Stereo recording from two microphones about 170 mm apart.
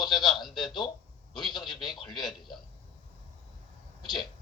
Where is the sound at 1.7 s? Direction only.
25° left (ahead or behind).